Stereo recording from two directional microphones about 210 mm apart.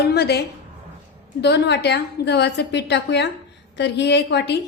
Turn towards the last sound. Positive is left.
turn(degrees=55)  # may be behind; listen again after turning